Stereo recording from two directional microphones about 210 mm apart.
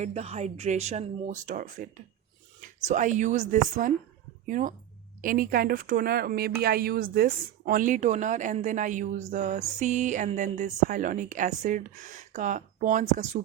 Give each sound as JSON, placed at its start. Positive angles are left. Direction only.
{"t": 0.0, "sound": "speech", "side_deg": -30}